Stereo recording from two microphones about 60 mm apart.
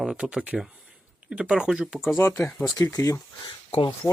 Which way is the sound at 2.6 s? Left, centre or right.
Left.